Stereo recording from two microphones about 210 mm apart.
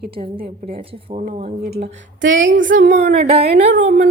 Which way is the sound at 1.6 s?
50° right (ahead or behind).